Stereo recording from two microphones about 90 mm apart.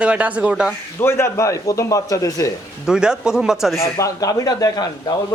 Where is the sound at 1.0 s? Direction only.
30° left (ahead or behind).